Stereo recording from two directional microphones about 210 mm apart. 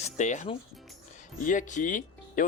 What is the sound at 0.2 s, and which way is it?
Speech, 35° left (ahead or behind).